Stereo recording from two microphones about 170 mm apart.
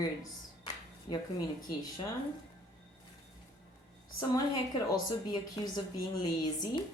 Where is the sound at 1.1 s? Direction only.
25° left (ahead or behind).